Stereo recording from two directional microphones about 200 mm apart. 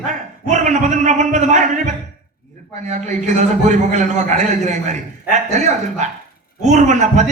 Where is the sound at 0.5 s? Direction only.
35° right (ahead or behind).